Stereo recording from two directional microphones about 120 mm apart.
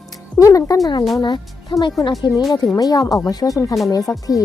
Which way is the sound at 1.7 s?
45° left (ahead or behind).